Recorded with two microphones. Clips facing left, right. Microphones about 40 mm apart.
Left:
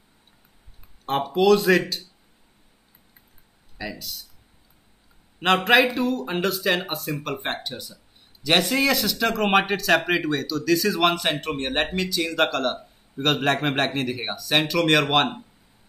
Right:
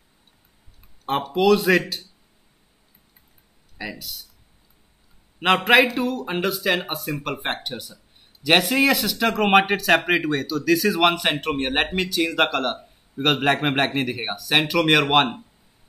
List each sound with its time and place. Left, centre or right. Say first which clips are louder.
1.3 s speech: even; centre
3.8 s speech: right 1 dB; centre
5.4 s speech: right 1 dB; centre